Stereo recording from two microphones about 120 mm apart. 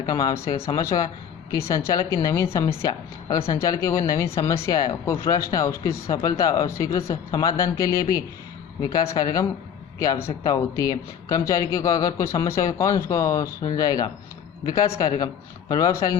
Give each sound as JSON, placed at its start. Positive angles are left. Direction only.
{"t": 0.0, "sound": "a man's voice", "side_deg": 30}